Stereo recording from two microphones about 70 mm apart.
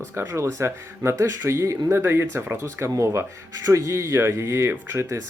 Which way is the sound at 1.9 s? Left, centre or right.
Right.